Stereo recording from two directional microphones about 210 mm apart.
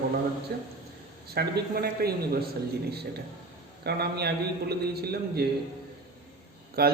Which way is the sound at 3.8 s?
50° right (ahead or behind).